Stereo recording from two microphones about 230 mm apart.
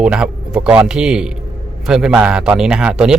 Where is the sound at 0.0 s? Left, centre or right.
Centre.